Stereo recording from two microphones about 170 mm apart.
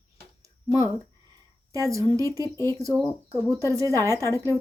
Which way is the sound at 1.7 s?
20° right (ahead or behind).